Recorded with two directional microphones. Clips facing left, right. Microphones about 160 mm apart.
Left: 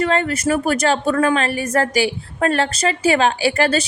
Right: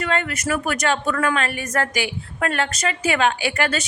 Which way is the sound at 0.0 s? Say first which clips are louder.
Left 6 dB; 35° left (ahead or behind).